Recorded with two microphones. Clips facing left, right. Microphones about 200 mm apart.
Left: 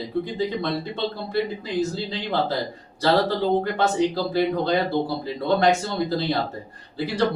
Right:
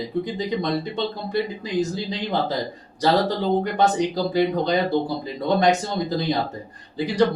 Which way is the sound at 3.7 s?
15° right (ahead or behind).